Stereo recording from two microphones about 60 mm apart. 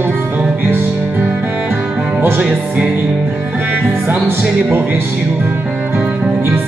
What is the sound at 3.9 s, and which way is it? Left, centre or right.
Music, right.